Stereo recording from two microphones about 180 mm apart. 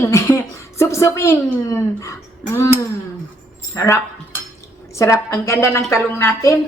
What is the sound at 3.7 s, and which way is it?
A woman's voice, 15° left (ahead or behind).